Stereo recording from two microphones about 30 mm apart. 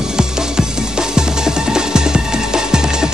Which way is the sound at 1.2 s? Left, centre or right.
Right.